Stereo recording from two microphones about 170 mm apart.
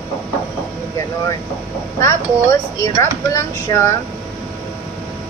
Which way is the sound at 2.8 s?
20° left (ahead or behind).